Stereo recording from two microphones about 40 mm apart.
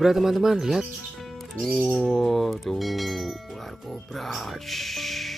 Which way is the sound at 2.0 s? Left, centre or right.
Centre.